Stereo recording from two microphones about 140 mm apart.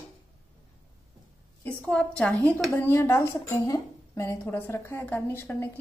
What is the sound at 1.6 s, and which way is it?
Speech, 10° left (ahead or behind).